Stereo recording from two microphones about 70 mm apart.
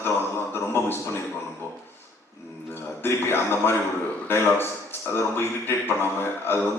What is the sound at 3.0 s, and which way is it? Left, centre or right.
A man's voice, left.